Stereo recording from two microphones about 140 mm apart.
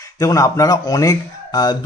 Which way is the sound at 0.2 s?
25° left (ahead or behind).